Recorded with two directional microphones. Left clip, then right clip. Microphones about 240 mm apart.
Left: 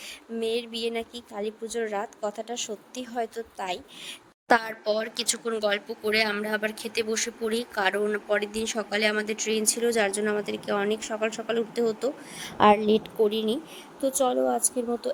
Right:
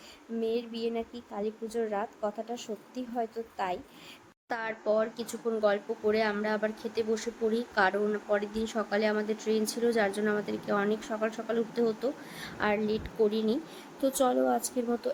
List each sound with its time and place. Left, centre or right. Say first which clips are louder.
0.3 s speech: left 3 dB; left
3.6 s a woman's voice: left 2 dB; centre
4.5 s speech: left 6 dB; left; by 15.1 s centre